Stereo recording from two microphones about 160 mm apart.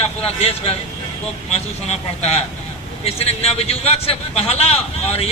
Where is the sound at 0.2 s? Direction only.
40° left (ahead or behind).